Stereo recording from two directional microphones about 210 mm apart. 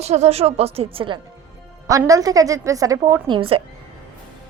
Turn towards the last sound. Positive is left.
turn(degrees=-25)  # may be behind; listen again after turning